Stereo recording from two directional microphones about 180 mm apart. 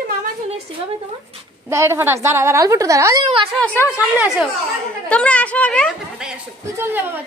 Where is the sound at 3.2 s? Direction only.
30° right (ahead or behind).